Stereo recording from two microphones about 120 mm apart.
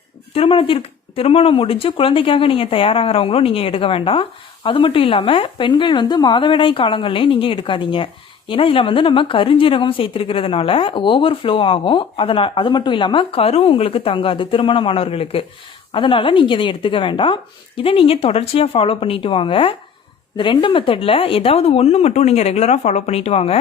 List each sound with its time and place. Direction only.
0.3 s speech: 50° left (ahead or behind)